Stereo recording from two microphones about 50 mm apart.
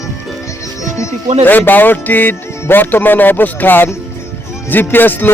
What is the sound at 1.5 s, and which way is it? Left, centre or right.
Speech, left.